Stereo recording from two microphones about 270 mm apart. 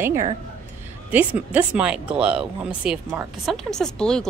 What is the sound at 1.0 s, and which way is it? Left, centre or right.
Speech, centre.